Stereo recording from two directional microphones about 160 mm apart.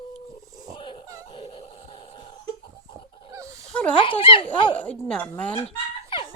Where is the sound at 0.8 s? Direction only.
30° left (ahead or behind).